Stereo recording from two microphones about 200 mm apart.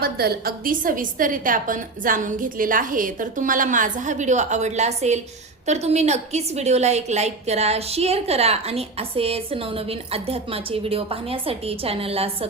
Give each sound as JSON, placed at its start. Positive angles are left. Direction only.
{"t": 0.0, "sound": "a woman's voice", "side_deg": -50}